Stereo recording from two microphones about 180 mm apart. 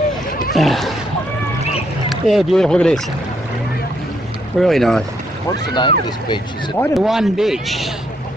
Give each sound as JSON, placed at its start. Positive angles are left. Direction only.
{"t": 0.6, "sound": "a man's voice", "side_deg": 0}
{"t": 2.0, "sound": "speech", "side_deg": 0}
{"t": 4.6, "sound": "a man's voice", "side_deg": 0}
{"t": 5.8, "sound": "speech", "side_deg": 25}
{"t": 6.9, "sound": "a man's voice", "side_deg": 0}